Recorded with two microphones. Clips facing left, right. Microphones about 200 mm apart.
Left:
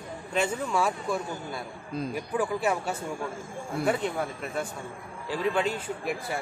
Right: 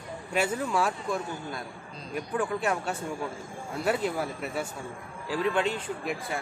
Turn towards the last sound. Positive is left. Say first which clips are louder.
# left 1 dB
turn(degrees=0)  # may be behind; listen again after turning